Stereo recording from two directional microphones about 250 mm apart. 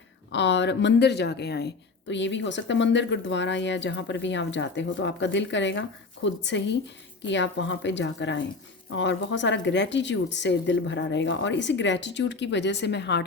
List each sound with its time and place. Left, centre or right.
0.3 s speech: left